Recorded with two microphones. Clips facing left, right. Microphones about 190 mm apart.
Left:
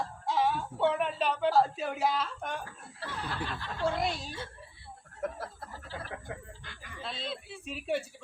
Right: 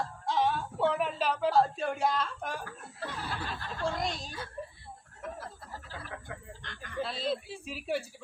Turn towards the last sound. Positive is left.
turn(degrees=0)  # may be behind; listen again after turning